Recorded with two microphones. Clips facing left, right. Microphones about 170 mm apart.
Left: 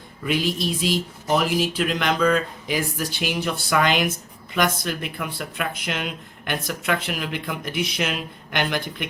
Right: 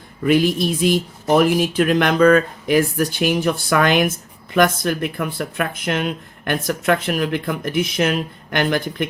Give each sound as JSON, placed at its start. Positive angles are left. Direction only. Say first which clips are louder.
{"t": 0.3, "sound": "speech", "louder": "right 7 dB", "side_deg": -55}